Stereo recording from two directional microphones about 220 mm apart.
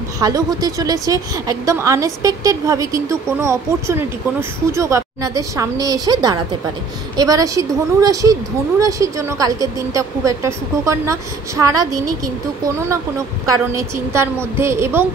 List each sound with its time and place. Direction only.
0.2 s a woman's voice: 15° right (ahead or behind)
13.5 s a woman's voice: 15° right (ahead or behind)